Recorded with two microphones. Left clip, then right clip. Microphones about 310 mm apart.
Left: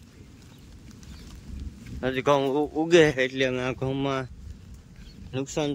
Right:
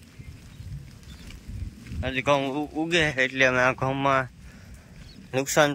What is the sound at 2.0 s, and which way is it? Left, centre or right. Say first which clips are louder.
Speech: left 1 dB; centre.